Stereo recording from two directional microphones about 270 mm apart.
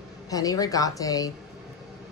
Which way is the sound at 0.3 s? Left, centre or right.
Centre.